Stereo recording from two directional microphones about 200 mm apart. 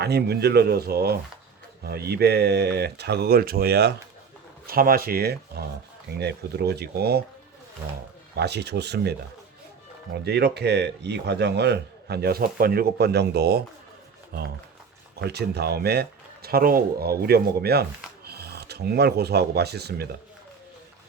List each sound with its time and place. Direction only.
0.0 s speech: 55° right (ahead or behind)
8.4 s a man's voice: 55° right (ahead or behind)
10.2 s a man's voice: 55° right (ahead or behind)
15.2 s speech: 55° right (ahead or behind)